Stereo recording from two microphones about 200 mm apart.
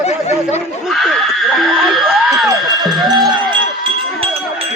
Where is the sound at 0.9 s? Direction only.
Centre (ahead or behind).